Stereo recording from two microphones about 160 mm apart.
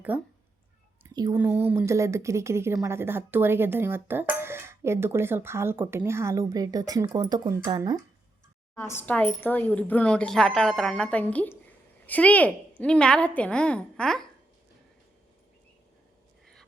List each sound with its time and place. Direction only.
0.1 s speech: 10° right (ahead or behind)
1.0 s speech: 20° right (ahead or behind)
8.7 s a woman's voice: 15° left (ahead or behind)